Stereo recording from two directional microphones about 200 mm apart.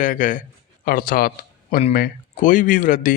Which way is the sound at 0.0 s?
40° left (ahead or behind).